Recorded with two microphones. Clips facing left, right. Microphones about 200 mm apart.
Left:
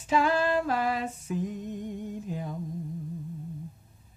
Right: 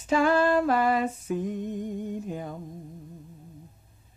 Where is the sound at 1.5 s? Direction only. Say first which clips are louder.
Right 4 dB; 50° right (ahead or behind).